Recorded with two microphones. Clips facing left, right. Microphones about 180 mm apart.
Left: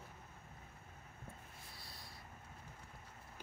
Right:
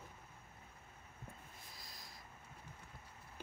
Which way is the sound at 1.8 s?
35° left (ahead or behind).